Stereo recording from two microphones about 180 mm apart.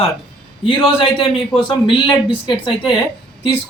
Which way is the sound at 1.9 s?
25° left (ahead or behind).